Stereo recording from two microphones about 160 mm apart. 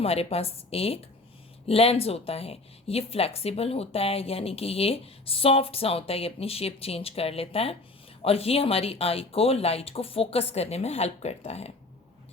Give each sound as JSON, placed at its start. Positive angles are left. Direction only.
{"t": 0.0, "sound": "speech", "side_deg": 40}